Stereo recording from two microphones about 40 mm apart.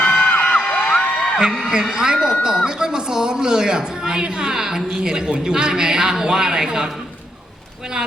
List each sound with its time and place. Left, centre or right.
0.0 s music: left
1.4 s speech: centre